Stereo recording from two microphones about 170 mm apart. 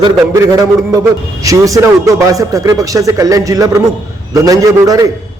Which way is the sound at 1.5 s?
20° right (ahead or behind).